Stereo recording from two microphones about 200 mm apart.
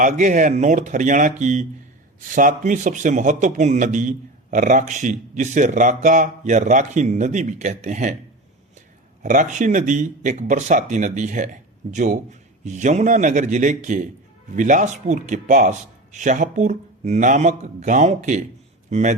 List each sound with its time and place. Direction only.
0.0 s speech: 40° right (ahead or behind)
9.2 s speech: 40° right (ahead or behind)